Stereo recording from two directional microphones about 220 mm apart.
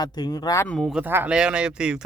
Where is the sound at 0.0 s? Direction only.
20° left (ahead or behind).